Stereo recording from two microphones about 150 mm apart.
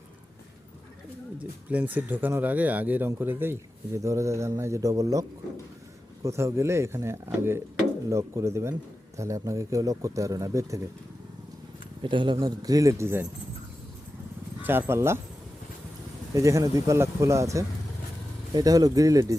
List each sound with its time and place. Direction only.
1.4 s speech: 10° right (ahead or behind)
6.2 s speech: 20° right (ahead or behind)
12.0 s speech: 35° right (ahead or behind); by 13.2 s 15° right (ahead or behind)
14.6 s speech: 15° right (ahead or behind)
16.3 s speech: 20° right (ahead or behind)